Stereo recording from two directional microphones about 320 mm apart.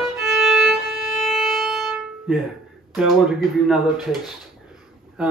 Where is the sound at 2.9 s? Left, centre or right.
Centre.